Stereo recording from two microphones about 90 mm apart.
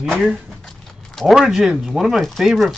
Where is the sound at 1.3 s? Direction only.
10° right (ahead or behind).